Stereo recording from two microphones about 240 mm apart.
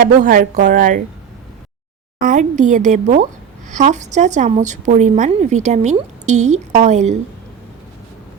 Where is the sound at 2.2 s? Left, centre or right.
Right.